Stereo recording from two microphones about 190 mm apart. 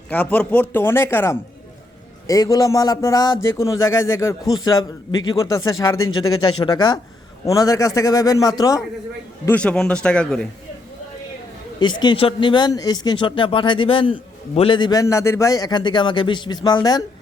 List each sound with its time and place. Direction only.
0.1 s a man's voice: 10° left (ahead or behind)
9.5 s speech: 5° left (ahead or behind)
11.8 s a man's voice: 25° left (ahead or behind)